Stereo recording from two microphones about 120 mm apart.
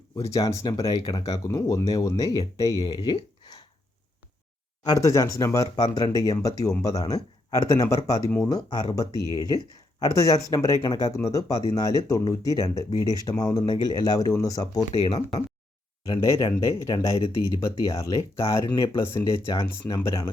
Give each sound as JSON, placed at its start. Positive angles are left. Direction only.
{"t": 0.2, "sound": "speech", "side_deg": 25}
{"t": 2.7, "sound": "speech", "side_deg": 40}
{"t": 4.9, "sound": "speech", "side_deg": 25}
{"t": 16.2, "sound": "speech", "side_deg": 30}
{"t": 17.2, "sound": "speech", "side_deg": 45}
{"t": 17.4, "sound": "speech", "side_deg": 30}